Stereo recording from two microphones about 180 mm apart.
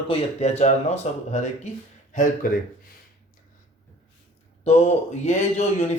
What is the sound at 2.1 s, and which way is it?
Speech, 50° left (ahead or behind).